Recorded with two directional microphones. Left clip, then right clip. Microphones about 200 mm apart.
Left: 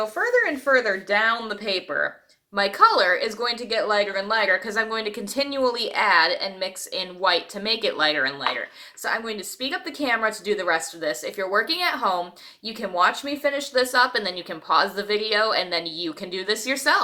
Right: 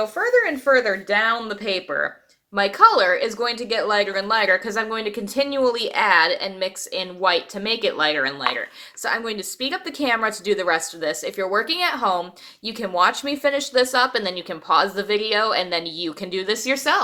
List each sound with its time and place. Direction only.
0.2 s speech: 15° right (ahead or behind)